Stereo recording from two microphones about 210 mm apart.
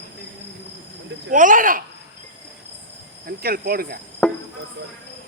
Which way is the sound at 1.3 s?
40° right (ahead or behind).